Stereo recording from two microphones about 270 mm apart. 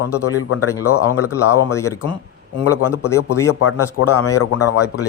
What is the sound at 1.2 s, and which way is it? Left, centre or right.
Speech, left.